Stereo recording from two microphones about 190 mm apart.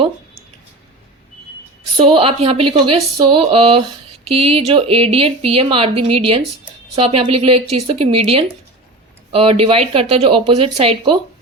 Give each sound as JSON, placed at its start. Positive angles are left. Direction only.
{"t": 2.0, "sound": "a woman's voice", "side_deg": -30}